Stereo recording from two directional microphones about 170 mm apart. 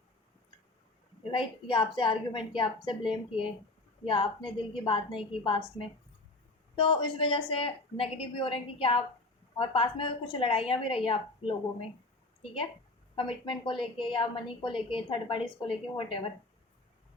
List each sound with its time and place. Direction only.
1.3 s a woman's voice: 30° left (ahead or behind)
6.7 s a woman's voice: 30° left (ahead or behind)
13.1 s a woman's voice: 30° left (ahead or behind)